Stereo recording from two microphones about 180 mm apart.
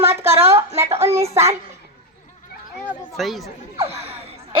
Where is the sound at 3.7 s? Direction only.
35° right (ahead or behind).